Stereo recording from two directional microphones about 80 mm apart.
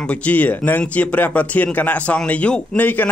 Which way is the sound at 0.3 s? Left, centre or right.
Left.